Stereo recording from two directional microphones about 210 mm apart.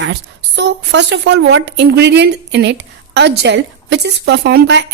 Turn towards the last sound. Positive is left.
turn(degrees=-50)  # may be behind; listen again after turning